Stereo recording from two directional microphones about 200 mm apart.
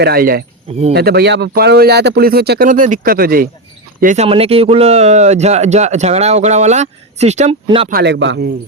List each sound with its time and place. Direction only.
0.0 s speech: 50° right (ahead or behind)
4.0 s speech: 35° right (ahead or behind)
7.9 s a man's voice: 55° right (ahead or behind)